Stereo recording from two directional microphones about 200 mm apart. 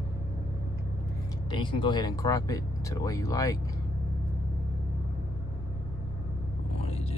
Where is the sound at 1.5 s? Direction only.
25° left (ahead or behind).